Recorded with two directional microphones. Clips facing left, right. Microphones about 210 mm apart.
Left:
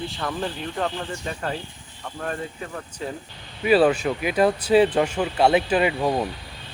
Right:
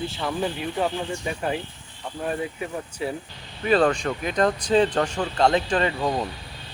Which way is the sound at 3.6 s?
5° left (ahead or behind).